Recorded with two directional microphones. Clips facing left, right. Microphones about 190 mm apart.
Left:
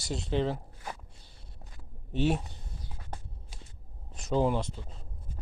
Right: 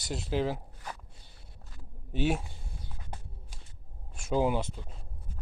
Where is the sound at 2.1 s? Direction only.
5° right (ahead or behind).